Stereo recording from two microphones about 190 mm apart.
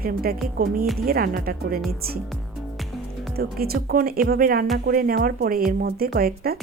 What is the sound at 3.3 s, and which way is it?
A woman's voice, 55° right (ahead or behind).